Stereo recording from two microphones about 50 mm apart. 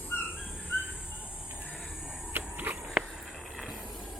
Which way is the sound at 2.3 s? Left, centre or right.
Right.